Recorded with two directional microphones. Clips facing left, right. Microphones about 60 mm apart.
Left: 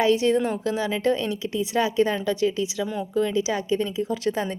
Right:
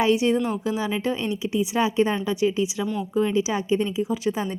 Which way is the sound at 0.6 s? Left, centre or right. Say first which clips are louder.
Left 1 dB; centre.